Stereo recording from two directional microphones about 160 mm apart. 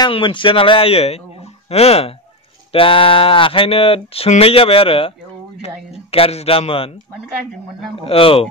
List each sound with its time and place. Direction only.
0.0 s speech: 30° left (ahead or behind)
6.1 s speech: 35° left (ahead or behind)
8.0 s speech: 35° left (ahead or behind)